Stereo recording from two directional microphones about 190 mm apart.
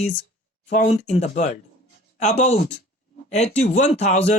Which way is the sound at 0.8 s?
35° left (ahead or behind).